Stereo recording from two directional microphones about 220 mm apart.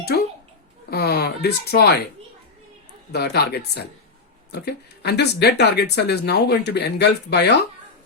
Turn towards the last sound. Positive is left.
turn(degrees=50)  # may be behind; listen again after turning